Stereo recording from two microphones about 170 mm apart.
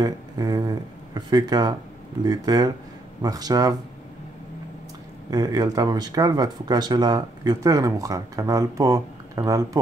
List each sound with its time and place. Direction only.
0.0 s speech: 25° right (ahead or behind)
5.3 s speech: 20° right (ahead or behind)